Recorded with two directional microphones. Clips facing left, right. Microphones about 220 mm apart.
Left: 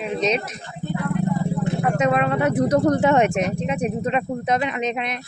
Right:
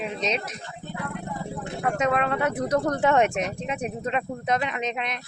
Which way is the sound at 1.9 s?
10° left (ahead or behind).